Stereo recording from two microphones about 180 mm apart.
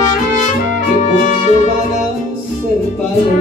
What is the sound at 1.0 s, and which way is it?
Music, 45° left (ahead or behind).